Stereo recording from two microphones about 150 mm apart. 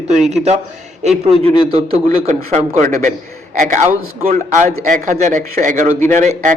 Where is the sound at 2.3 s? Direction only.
45° right (ahead or behind).